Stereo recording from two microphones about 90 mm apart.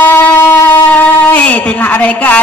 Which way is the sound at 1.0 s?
15° left (ahead or behind).